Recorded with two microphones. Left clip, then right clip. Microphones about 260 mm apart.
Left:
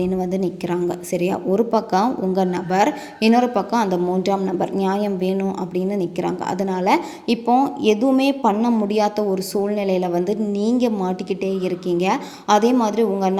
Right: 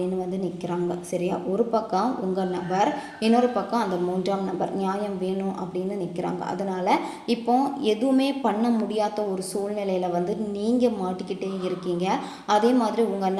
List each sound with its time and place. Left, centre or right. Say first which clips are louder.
0.0 s a woman's voice: left 6 dB; left